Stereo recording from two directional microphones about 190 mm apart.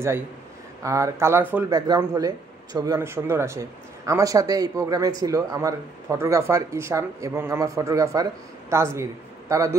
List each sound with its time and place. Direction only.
0.8 s speech: 15° right (ahead or behind)